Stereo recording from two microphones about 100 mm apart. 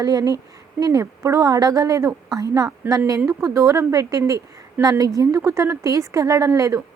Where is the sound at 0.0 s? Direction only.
35° right (ahead or behind).